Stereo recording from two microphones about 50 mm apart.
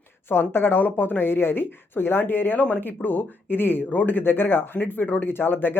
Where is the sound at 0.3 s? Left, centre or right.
Left.